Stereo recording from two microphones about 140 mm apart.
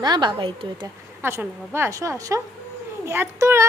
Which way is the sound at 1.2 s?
15° right (ahead or behind).